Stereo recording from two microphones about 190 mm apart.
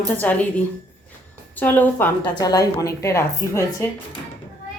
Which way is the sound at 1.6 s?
10° left (ahead or behind).